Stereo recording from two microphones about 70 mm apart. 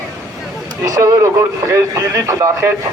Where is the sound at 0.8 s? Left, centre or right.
Right.